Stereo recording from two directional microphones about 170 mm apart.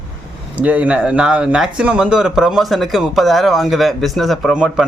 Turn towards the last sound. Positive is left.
turn(degrees=-5)  # may be behind; listen again after turning